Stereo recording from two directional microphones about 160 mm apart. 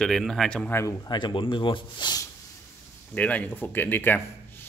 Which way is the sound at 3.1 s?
10° left (ahead or behind).